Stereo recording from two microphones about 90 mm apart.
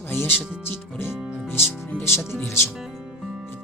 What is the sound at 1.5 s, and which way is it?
Speech, 25° left (ahead or behind).